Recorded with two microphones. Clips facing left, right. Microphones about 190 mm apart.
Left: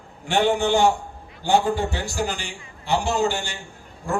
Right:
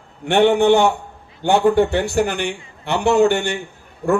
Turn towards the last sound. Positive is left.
turn(degrees=-60)  # may be behind; listen again after turning